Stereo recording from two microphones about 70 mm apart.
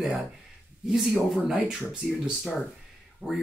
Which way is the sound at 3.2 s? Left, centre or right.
Centre.